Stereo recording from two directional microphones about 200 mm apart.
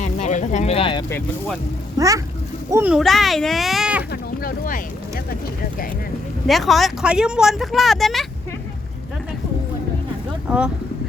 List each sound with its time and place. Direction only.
0.0 s a sound: 35° left (ahead or behind)
2.0 s a child's voice: 15° right (ahead or behind)
2.9 s speech: centre (ahead or behind)
4.1 s speech: 45° left (ahead or behind)
6.5 s speech: centre (ahead or behind)